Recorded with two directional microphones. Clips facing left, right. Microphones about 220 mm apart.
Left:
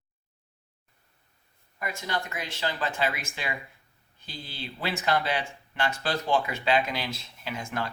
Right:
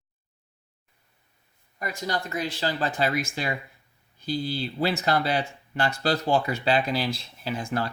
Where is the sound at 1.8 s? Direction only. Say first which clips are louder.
Right 3 dB; 35° right (ahead or behind).